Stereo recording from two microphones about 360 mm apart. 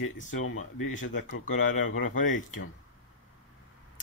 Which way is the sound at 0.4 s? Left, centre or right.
Left.